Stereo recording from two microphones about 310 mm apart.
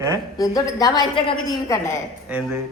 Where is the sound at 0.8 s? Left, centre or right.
Centre.